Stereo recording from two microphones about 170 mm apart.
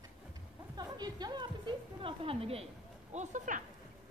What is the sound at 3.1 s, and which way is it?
Speech, 45° right (ahead or behind).